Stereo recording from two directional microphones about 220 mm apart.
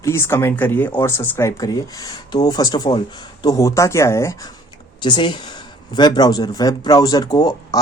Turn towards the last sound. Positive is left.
turn(degrees=15)  # may be behind; listen again after turning